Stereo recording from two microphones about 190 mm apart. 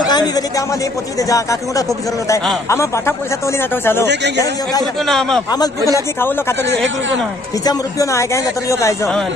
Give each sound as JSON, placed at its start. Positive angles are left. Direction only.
{"t": 0.0, "sound": "a man's voice", "side_deg": 20}
{"t": 5.0, "sound": "speech", "side_deg": 0}
{"t": 5.5, "sound": "speech", "side_deg": 20}
{"t": 7.6, "sound": "speech", "side_deg": 15}